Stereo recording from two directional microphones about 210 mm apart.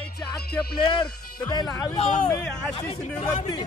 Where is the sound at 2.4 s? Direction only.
5° left (ahead or behind).